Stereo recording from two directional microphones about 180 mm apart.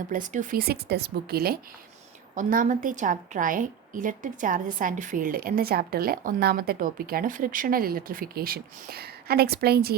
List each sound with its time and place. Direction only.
0.1 s speech: 50° right (ahead or behind)
2.3 s a woman's voice: 50° right (ahead or behind)